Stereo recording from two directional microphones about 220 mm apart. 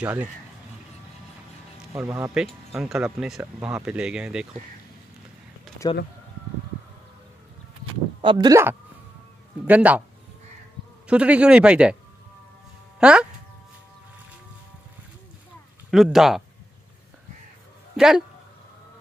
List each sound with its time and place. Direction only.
0.0 s speech: 5° right (ahead or behind)
2.0 s speech: 15° right (ahead or behind)
2.3 s speech: 5° right (ahead or behind)
8.2 s speech: 20° right (ahead or behind)
11.1 s speech: 5° right (ahead or behind)
13.0 s speech: 5° right (ahead or behind)
15.9 s speech: centre (ahead or behind)
17.9 s speech: centre (ahead or behind)